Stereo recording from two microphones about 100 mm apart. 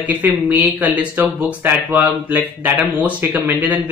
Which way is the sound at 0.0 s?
15° right (ahead or behind).